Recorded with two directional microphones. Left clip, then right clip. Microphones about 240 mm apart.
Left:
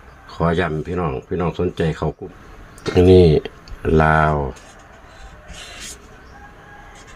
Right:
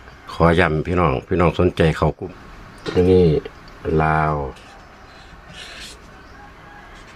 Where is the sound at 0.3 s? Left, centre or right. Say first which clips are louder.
Right 4 dB; centre.